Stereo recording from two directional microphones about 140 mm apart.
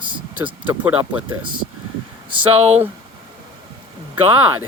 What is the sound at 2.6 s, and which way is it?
Speech, 50° right (ahead or behind).